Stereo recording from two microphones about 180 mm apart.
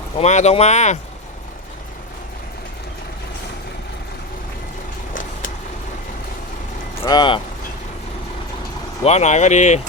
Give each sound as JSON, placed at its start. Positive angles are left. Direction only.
{"t": 0.2, "sound": "speech", "side_deg": 40}
{"t": 7.0, "sound": "speech", "side_deg": 25}
{"t": 9.0, "sound": "speech", "side_deg": 40}